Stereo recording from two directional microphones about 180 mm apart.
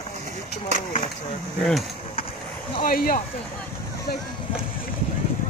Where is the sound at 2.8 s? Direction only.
55° left (ahead or behind).